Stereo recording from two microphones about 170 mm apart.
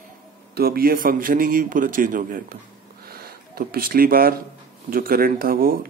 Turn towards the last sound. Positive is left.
turn(degrees=-60)  # may be behind; listen again after turning